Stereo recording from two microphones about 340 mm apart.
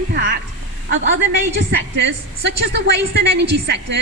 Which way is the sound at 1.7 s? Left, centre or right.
Right.